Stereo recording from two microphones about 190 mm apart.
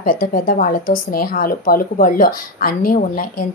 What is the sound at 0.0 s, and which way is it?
Speech, 50° left (ahead or behind).